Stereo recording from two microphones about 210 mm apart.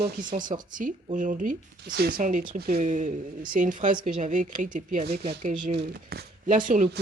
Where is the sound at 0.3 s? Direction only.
40° right (ahead or behind).